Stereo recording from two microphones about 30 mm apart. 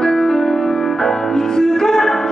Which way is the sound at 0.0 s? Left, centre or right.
Left.